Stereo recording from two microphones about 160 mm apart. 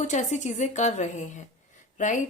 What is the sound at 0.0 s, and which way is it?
Speech, 50° left (ahead or behind).